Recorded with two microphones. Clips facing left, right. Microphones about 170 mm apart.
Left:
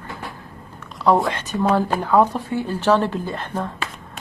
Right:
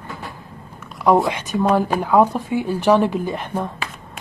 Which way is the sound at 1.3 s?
15° right (ahead or behind).